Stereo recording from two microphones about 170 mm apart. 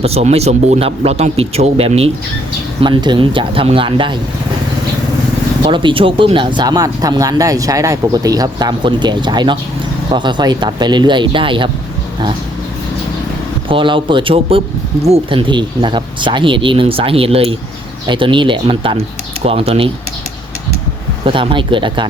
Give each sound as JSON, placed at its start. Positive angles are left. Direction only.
{"t": 0.0, "sound": "speech", "side_deg": -35}
{"t": 5.6, "sound": "speech", "side_deg": -30}
{"t": 13.7, "sound": "speech", "side_deg": -30}
{"t": 21.2, "sound": "speech", "side_deg": -30}